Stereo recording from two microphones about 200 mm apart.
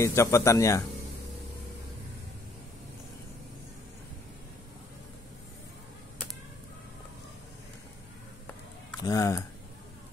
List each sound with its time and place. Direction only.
0.0 s speech: 15° left (ahead or behind)
9.0 s speech: 15° left (ahead or behind)